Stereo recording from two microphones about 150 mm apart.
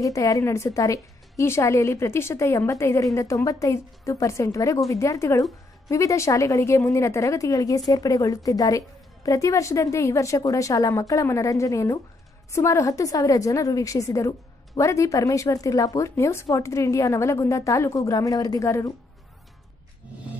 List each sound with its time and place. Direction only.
0.0 s a woman's voice: 20° left (ahead or behind)